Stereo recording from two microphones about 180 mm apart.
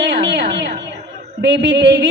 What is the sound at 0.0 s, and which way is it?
Music, 75° right (ahead or behind).